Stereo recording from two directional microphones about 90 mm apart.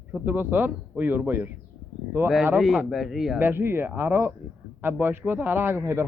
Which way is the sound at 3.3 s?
20° right (ahead or behind).